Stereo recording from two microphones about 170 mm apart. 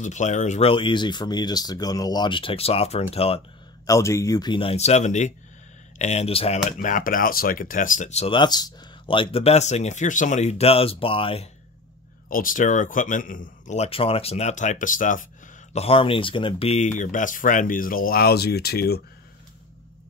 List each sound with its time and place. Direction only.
0.0 s speech: 45° left (ahead or behind)
3.8 s speech: 20° left (ahead or behind); by 6.6 s 35° left (ahead or behind)
6.8 s speech: 50° left (ahead or behind); by 11.4 s 30° left (ahead or behind)
12.3 s speech: 55° left (ahead or behind)
15.7 s speech: 35° left (ahead or behind); by 18.9 s 70° left (ahead or behind)